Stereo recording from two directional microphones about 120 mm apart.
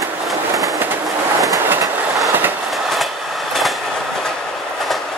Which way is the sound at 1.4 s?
20° right (ahead or behind).